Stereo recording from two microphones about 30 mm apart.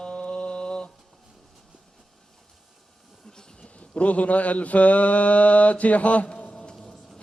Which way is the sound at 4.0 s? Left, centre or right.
Left.